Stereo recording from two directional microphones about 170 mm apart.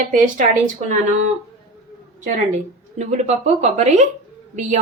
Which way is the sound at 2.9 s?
40° right (ahead or behind).